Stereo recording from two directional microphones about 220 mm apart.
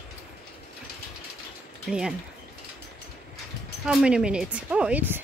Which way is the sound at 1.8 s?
5° right (ahead or behind).